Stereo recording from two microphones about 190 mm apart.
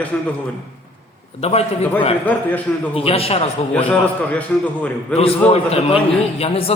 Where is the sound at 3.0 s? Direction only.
30° left (ahead or behind).